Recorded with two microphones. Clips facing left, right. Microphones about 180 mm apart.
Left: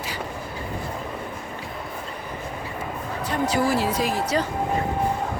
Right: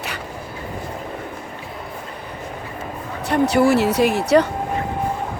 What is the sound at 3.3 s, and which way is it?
Speech, 70° right (ahead or behind).